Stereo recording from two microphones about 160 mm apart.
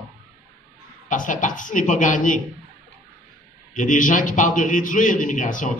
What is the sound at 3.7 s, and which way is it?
A man's voice, 55° left (ahead or behind).